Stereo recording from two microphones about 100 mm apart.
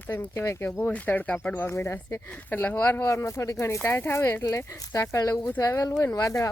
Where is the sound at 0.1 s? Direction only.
25° left (ahead or behind).